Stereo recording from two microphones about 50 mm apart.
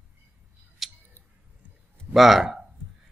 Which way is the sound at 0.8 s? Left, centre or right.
Centre.